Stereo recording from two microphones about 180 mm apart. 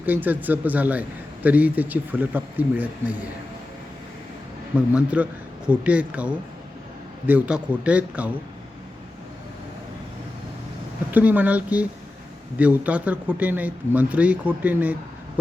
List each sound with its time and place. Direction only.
0.0 s a man's voice: 10° right (ahead or behind)
4.9 s a man's voice: 5° right (ahead or behind)
11.1 s a man's voice: 10° right (ahead or behind)